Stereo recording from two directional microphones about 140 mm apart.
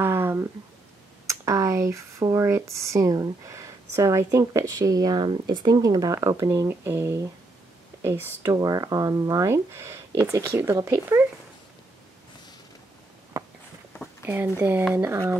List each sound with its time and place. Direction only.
0.0 s a sound: 15° right (ahead or behind)
1.2 s speech: 20° right (ahead or behind)
14.2 s speech: 15° right (ahead or behind)